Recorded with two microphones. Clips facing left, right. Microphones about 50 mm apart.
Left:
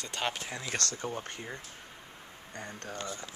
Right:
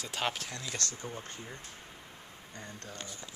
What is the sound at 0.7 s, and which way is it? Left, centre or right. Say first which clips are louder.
Speech: left 5 dB; left.